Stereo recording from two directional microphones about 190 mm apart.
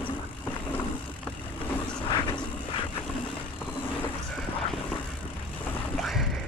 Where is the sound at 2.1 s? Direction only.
25° left (ahead or behind).